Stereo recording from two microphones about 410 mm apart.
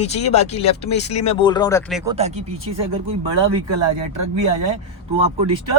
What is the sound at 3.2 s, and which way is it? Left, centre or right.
Speech, right.